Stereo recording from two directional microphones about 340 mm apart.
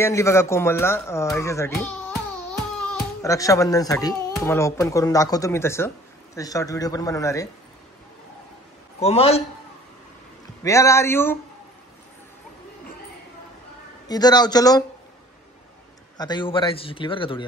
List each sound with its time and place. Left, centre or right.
0.0 s speech: centre
2.9 s speech: centre
9.0 s speech: centre
10.6 s speech: centre
14.0 s speech: centre
16.2 s speech: centre